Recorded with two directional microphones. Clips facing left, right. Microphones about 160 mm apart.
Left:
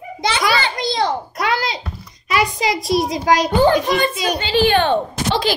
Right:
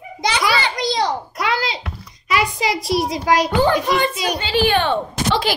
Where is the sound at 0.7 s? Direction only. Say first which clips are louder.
Even; 25° left (ahead or behind).